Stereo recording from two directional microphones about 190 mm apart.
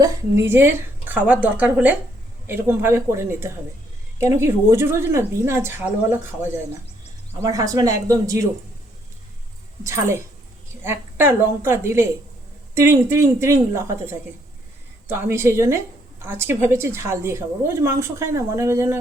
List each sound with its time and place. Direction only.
0.0 s a woman's voice: 15° right (ahead or behind)
7.4 s a woman's voice: 20° right (ahead or behind)
9.8 s a woman's voice: 15° right (ahead or behind)